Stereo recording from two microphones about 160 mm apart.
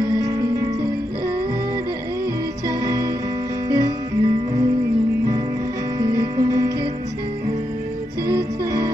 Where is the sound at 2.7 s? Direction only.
20° right (ahead or behind).